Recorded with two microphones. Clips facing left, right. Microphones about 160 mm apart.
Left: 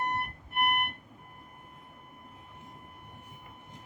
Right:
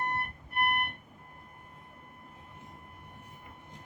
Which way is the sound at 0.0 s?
20° left (ahead or behind).